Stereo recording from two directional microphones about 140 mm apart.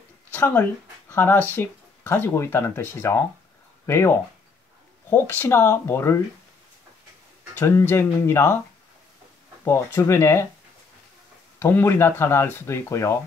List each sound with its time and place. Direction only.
0.3 s speech: 10° left (ahead or behind)
5.1 s speech: 15° left (ahead or behind)
7.5 s speech: 20° left (ahead or behind)
9.7 s speech: 20° left (ahead or behind)
11.6 s speech: 15° left (ahead or behind)